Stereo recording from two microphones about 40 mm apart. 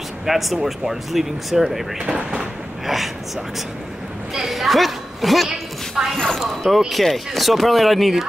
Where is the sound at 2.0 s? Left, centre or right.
Centre.